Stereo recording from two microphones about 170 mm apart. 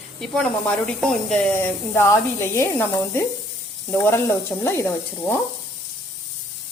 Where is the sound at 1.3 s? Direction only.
5° left (ahead or behind).